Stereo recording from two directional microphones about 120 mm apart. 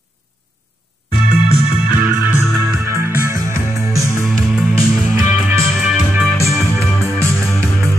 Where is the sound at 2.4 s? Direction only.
30° left (ahead or behind).